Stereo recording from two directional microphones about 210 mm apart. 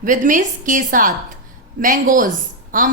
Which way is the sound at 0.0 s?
40° right (ahead or behind).